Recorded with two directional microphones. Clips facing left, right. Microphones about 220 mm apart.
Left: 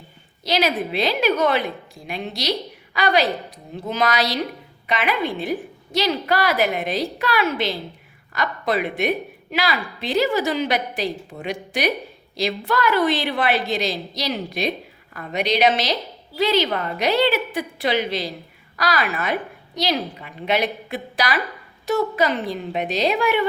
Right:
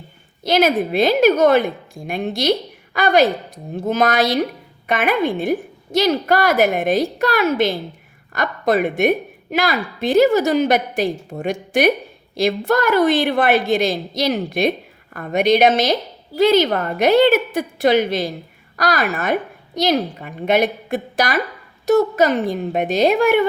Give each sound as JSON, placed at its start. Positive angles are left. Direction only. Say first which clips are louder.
{"t": 0.4, "sound": "a woman's voice", "louder": "right 5 dB", "side_deg": -50}